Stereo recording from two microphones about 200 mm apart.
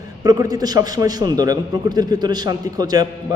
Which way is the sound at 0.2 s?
15° right (ahead or behind).